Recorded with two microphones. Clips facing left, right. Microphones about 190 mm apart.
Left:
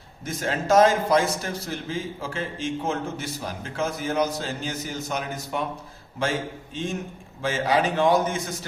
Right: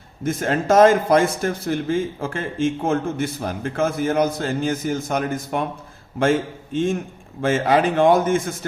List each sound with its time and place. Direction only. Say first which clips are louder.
0.3 s a man's voice: right 4 dB; 55° right (ahead or behind)
7.4 s a man's voice: right 5 dB; 50° right (ahead or behind)